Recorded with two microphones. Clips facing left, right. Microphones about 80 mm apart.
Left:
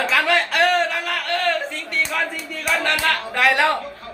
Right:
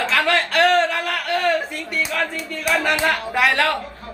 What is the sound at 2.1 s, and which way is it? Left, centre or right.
Speech, centre.